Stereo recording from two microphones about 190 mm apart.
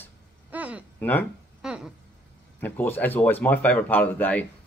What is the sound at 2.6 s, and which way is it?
Speech, 10° left (ahead or behind).